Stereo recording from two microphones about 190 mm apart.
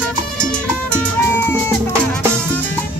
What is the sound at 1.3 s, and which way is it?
Music, 15° left (ahead or behind).